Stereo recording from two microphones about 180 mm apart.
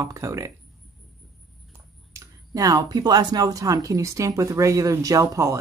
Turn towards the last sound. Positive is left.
turn(degrees=-15)  # may be behind; listen again after turning